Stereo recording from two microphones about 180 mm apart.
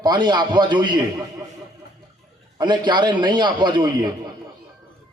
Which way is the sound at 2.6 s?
25° right (ahead or behind).